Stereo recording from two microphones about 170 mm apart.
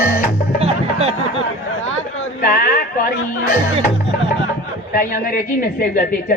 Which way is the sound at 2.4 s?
60° left (ahead or behind).